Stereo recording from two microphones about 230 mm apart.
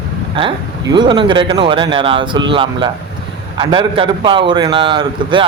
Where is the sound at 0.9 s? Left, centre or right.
Right.